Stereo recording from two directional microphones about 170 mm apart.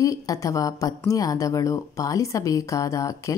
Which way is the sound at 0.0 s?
20° left (ahead or behind).